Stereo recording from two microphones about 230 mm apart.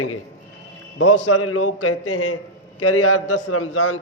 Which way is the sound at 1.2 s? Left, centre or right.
Left.